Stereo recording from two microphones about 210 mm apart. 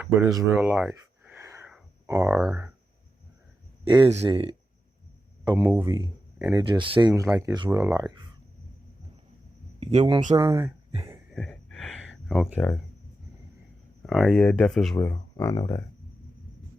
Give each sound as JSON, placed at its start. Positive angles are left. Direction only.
{"t": 0.0, "sound": "a sound", "side_deg": -15}
{"t": 2.0, "sound": "speech", "side_deg": -15}
{"t": 2.3, "sound": "speech", "side_deg": -5}
{"t": 3.8, "sound": "speech", "side_deg": -25}
{"t": 7.1, "sound": "speech", "side_deg": -10}
{"t": 9.8, "sound": "speech", "side_deg": -30}
{"t": 10.3, "sound": "speech", "side_deg": -15}
{"t": 11.3, "sound": "a sound", "side_deg": 0}
{"t": 12.3, "sound": "speech", "side_deg": 0}
{"t": 14.1, "sound": "speech", "side_deg": 0}